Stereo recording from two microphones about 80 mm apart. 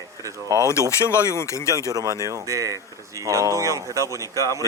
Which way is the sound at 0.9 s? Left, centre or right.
Left.